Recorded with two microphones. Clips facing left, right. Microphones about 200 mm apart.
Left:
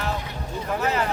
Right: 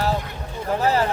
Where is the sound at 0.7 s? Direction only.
35° right (ahead or behind).